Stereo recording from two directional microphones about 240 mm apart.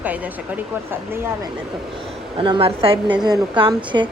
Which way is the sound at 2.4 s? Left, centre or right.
Right.